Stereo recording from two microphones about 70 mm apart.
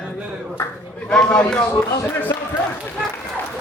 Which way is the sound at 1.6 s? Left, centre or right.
Left.